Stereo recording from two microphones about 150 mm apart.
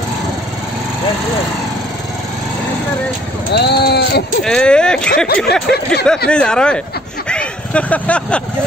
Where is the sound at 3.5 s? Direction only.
90° left.